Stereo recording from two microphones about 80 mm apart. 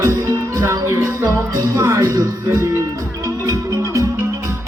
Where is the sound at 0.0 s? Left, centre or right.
Right.